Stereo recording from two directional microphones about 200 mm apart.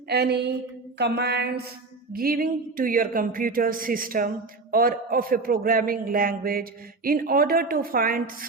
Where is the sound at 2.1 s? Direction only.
45° right (ahead or behind).